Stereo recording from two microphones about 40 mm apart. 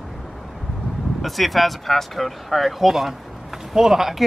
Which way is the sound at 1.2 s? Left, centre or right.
Centre.